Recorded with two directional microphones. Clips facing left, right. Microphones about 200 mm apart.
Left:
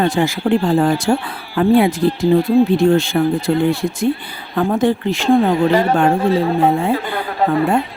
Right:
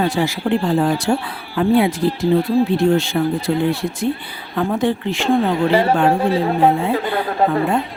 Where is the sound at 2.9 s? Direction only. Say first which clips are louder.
Left 2 dB; 50° left (ahead or behind).